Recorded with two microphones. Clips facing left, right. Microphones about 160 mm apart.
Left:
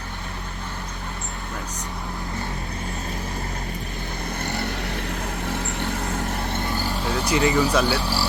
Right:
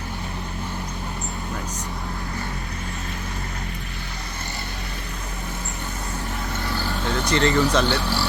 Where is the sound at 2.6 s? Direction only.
35° left (ahead or behind).